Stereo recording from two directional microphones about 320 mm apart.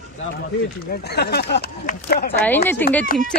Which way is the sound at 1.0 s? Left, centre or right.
Left.